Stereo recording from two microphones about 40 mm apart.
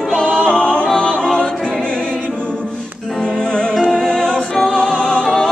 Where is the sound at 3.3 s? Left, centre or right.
Left.